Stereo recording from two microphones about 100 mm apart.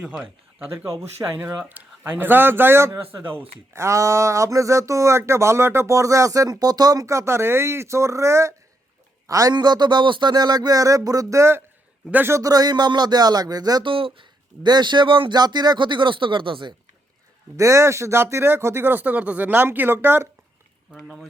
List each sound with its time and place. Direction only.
0.0 s speech: 10° right (ahead or behind)
0.9 s speech: 30° right (ahead or behind)
1.7 s speech: 20° right (ahead or behind)
12.4 s speech: 40° right (ahead or behind)
13.9 s speech: 60° right (ahead or behind)
17.6 s speech: 30° right (ahead or behind)